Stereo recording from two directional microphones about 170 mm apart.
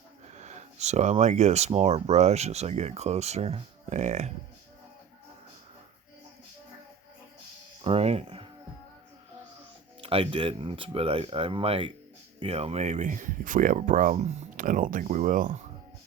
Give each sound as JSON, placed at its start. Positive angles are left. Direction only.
{"t": 0.3, "sound": "speech", "side_deg": -40}
{"t": 7.9, "sound": "speech", "side_deg": -35}
{"t": 10.0, "sound": "speech", "side_deg": -30}